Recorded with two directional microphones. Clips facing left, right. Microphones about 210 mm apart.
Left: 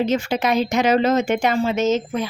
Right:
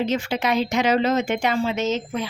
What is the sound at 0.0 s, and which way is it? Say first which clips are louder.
A woman's voice: left 3 dB; 45° left (ahead or behind).